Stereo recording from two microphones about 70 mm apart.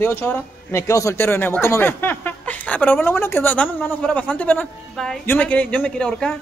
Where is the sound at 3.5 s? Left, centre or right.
Centre.